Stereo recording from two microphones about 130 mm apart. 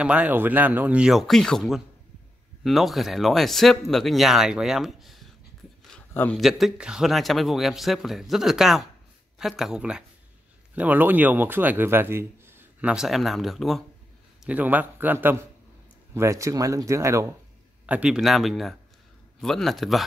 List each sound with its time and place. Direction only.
0.0 s speech: 10° right (ahead or behind)
5.9 s a sound: 10° left (ahead or behind)
6.4 s a man's voice: 5° right (ahead or behind)
12.9 s speech: centre (ahead or behind)
14.4 s speech: 10° right (ahead or behind)
17.8 s speech: 10° right (ahead or behind)